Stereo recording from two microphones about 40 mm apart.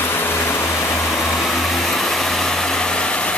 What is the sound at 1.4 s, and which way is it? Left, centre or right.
Vehicle, centre.